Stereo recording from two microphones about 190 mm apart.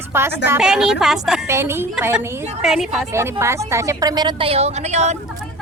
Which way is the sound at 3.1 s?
15° right (ahead or behind).